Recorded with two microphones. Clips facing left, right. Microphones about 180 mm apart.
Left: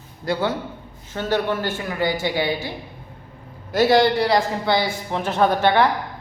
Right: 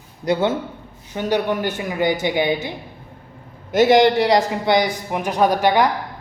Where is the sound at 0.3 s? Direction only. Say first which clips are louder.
Right 4 dB; 20° right (ahead or behind).